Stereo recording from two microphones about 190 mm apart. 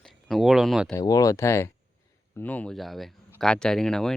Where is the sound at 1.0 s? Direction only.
20° left (ahead or behind).